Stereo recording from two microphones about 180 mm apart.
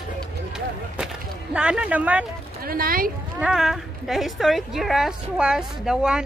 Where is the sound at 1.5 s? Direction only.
5° right (ahead or behind).